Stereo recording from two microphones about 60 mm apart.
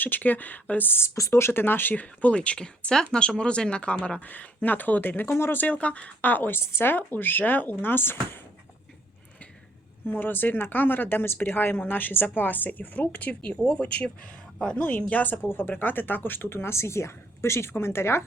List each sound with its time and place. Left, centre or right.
0.0 s speech: left
1.1 s speech: left
5.6 s speech: left
6.6 s speech: left
6.9 s speech: left
10.1 s speech: left
15.4 s speech: left